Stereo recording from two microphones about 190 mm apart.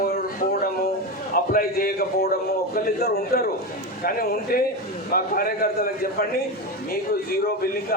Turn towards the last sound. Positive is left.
turn(degrees=50)  # may be behind; listen again after turning